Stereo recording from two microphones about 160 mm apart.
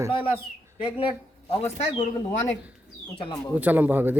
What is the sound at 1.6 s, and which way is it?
Speech, 45° left (ahead or behind).